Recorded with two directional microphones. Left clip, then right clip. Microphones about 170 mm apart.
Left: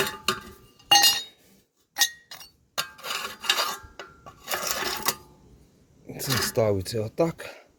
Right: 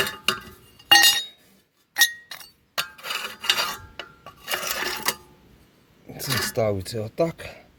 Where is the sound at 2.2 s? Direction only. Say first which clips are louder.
Right 4 dB; 5° right (ahead or behind).